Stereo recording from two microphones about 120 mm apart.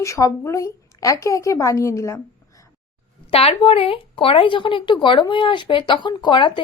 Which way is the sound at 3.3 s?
55° left (ahead or behind).